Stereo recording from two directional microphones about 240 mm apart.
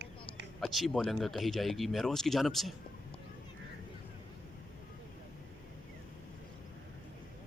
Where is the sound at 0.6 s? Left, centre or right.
Centre.